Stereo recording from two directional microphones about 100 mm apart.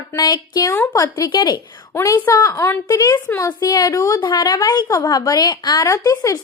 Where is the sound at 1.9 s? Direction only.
25° left (ahead or behind).